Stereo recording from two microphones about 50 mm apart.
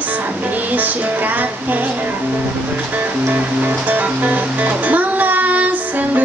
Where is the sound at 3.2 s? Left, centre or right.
Right.